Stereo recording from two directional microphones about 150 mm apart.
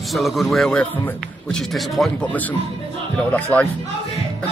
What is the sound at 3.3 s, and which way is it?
Speech, 10° left (ahead or behind).